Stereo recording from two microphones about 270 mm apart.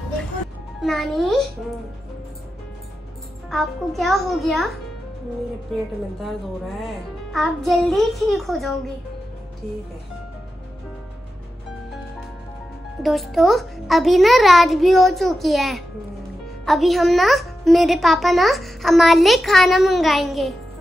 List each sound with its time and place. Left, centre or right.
0.7 s a child's voice: centre
3.4 s a child's voice: centre
5.7 s a child's voice: centre
7.3 s a child's voice: centre
13.0 s a child's voice: centre